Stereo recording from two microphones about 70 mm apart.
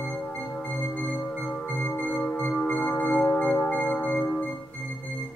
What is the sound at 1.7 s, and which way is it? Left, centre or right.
Music, left.